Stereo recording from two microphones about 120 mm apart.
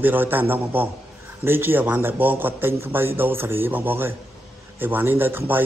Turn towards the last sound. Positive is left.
turn(degrees=-15)  # may be behind; listen again after turning